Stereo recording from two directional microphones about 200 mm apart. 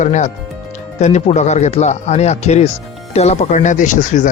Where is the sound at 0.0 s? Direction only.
35° left (ahead or behind).